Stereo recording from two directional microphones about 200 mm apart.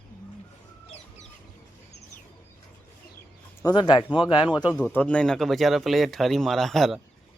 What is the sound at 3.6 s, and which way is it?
Speech, 20° left (ahead or behind).